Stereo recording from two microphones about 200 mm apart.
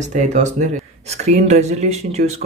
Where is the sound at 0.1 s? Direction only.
35° right (ahead or behind).